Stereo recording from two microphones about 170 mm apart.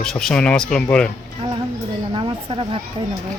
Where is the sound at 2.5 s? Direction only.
30° right (ahead or behind).